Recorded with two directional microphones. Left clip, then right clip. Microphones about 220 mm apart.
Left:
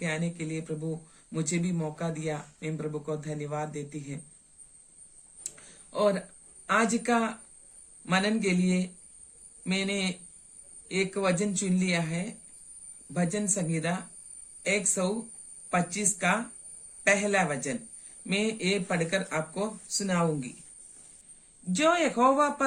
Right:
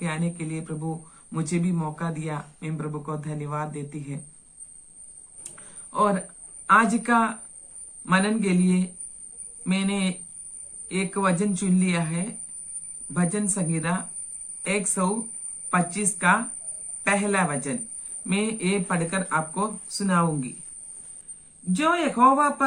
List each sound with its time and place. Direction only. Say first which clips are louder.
0.0 s speech: right 2 dB; 15° left (ahead or behind)
5.9 s speech: right 3 dB; 15° left (ahead or behind)
21.8 s speech: right 3 dB; 15° left (ahead or behind)